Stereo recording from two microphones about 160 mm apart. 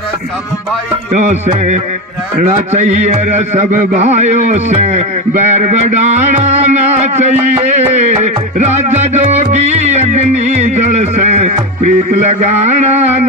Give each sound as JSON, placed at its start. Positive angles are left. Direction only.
{"t": 1.1, "sound": "a man's voice", "side_deg": -45}